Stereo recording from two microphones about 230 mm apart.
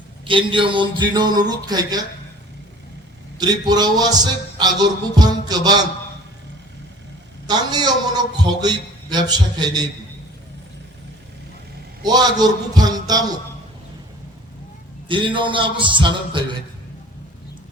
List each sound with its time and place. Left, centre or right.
0.3 s speech: right
3.3 s speech: centre
7.4 s speech: centre
12.0 s speech: centre
15.0 s a man's voice: right